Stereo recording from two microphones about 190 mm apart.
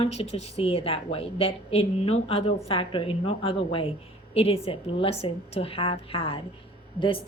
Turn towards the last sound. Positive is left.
turn(degrees=25)  # may be behind; listen again after turning